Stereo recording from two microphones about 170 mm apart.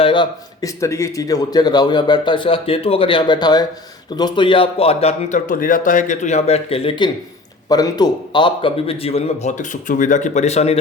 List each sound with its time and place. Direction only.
0.0 s a man's voice: 30° left (ahead or behind)
5.5 s speech: 50° left (ahead or behind); by 7.1 s 35° left (ahead or behind)
7.7 s speech: 25° left (ahead or behind); by 10.8 s 40° left (ahead or behind)